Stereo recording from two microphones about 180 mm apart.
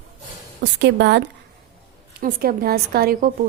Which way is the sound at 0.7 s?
75° right (ahead or behind).